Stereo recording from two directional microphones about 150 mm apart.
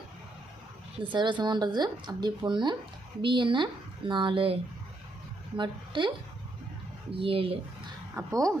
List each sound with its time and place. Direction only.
1.0 s speech: 30° right (ahead or behind)
5.5 s speech: 30° right (ahead or behind)
7.1 s speech: 40° right (ahead or behind)
8.1 s speech: 20° right (ahead or behind)